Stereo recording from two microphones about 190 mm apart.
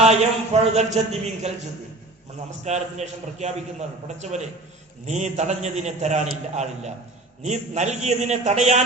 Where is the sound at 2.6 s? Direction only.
35° right (ahead or behind).